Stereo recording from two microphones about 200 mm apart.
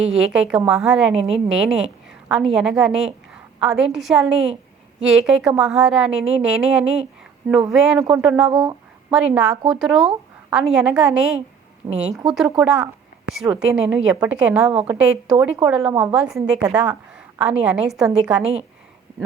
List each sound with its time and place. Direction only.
0.0 s a woman's voice: 5° right (ahead or behind)
11.8 s a woman's voice: 15° right (ahead or behind)
12.2 s a woman's voice: centre (ahead or behind)